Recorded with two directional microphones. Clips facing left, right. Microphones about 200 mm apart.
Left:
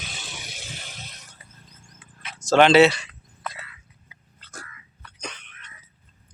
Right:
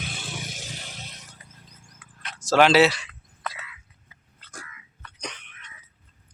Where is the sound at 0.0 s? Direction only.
55° right (ahead or behind); by 1.2 s 30° right (ahead or behind).